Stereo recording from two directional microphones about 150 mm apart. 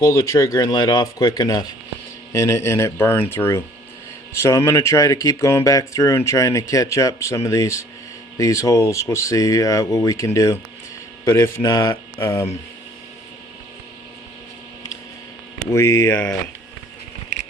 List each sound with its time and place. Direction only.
0.0 s speech: 20° left (ahead or behind)
15.7 s speech: 20° left (ahead or behind)